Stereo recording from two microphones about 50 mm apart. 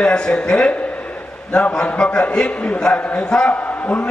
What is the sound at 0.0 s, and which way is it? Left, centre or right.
A man's voice, centre.